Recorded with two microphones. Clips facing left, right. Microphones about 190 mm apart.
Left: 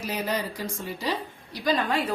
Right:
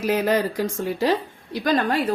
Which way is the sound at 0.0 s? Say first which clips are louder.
Right 9 dB; 90° right.